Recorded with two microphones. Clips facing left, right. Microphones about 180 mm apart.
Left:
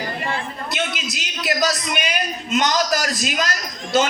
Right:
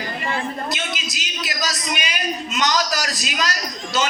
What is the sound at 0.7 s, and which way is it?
A man's voice, 60° left (ahead or behind).